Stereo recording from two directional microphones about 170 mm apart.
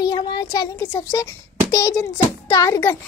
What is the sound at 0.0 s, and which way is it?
A child's voice, 25° left (ahead or behind).